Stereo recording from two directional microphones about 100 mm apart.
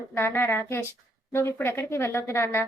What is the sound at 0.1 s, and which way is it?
A woman's voice, 25° left (ahead or behind).